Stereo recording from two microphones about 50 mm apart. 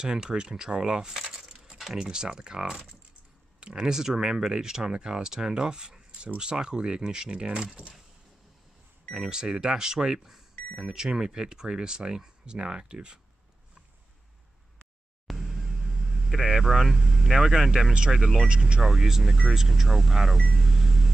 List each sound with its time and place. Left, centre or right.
0.0 s speech: centre
9.1 s speech: centre
15.2 s vehicle: centre
18.1 s speech: centre
18.5 s speech: centre
18.8 s speech: centre
20.4 s vehicle: centre